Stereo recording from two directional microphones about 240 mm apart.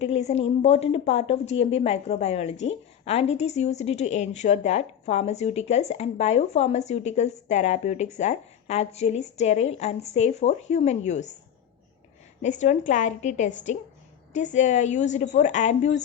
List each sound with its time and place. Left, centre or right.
0.0 s a woman's voice: left
12.4 s a woman's voice: left